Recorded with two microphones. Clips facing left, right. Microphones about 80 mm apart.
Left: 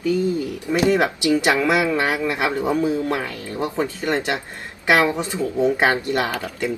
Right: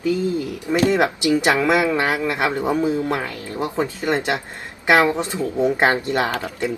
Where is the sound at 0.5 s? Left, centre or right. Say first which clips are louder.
Right 1 dB; centre.